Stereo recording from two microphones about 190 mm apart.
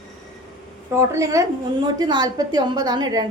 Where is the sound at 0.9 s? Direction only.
15° right (ahead or behind).